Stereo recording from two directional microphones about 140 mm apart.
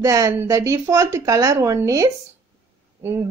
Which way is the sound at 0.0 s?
25° right (ahead or behind).